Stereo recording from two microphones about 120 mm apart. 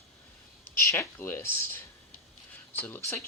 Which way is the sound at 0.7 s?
25° left (ahead or behind).